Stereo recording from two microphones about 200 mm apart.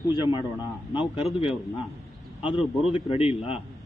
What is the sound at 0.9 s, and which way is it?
Speech, 30° left (ahead or behind).